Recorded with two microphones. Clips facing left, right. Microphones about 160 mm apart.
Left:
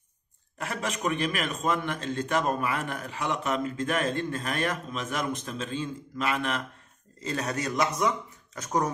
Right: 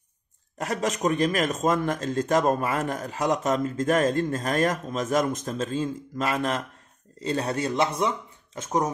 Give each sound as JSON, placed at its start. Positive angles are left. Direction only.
{"t": 0.6, "sound": "a man's voice", "side_deg": -40}